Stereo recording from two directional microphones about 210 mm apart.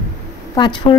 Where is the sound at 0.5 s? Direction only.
20° left (ahead or behind).